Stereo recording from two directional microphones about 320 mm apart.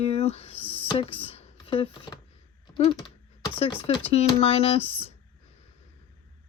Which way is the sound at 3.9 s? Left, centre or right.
Centre.